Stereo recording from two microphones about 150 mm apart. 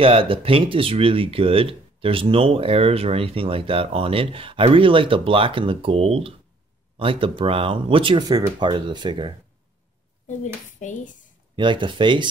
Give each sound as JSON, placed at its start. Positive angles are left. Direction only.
{"t": 0.0, "sound": "speech", "side_deg": -35}
{"t": 10.2, "sound": "speech", "side_deg": 55}
{"t": 11.5, "sound": "speech", "side_deg": -30}